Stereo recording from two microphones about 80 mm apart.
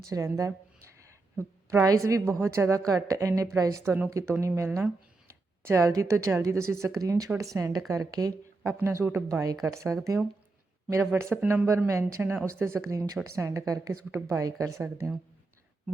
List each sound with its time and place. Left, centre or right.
0.1 s a woman's voice: right
1.0 s a sound: right
2.0 s a woman's voice: right
5.3 s a sound: right
5.9 s a woman's voice: right
8.6 s a woman's voice: right
11.9 s a woman's voice: right